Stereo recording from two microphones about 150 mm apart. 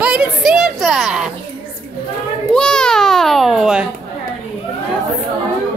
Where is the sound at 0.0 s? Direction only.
5° right (ahead or behind).